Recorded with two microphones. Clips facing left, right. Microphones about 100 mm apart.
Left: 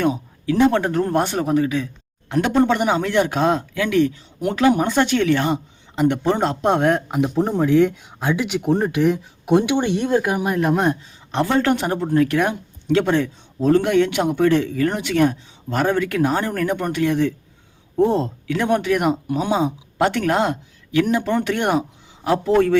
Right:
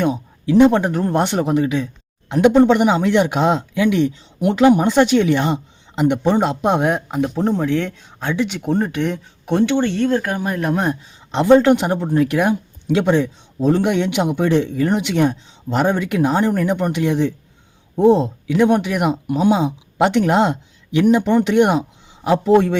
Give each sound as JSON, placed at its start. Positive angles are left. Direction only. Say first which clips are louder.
{"t": 0.4, "sound": "speech", "louder": "right 4 dB", "side_deg": -15}
{"t": 7.1, "sound": "speech", "louder": "right 1 dB", "side_deg": 5}
{"t": 11.3, "sound": "speech", "louder": "right 7 dB", "side_deg": -20}
{"t": 20.0, "sound": "speech", "louder": "right 3 dB", "side_deg": -20}